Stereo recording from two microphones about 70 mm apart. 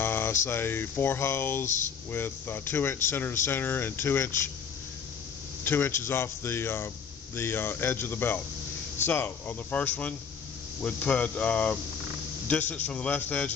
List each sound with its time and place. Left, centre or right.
0.0 s a sound: left
2.1 s speech: left
5.6 s speech: left